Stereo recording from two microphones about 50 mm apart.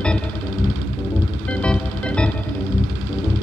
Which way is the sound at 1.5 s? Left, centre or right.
Left.